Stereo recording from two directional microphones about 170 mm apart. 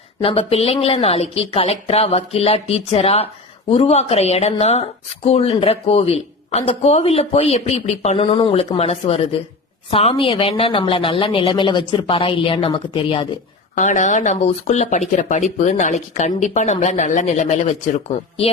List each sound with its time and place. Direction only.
0.2 s speech: 35° left (ahead or behind)
13.7 s speech: 45° left (ahead or behind)